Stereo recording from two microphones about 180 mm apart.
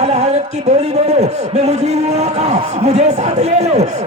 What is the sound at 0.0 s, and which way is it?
A man's voice, 40° right (ahead or behind).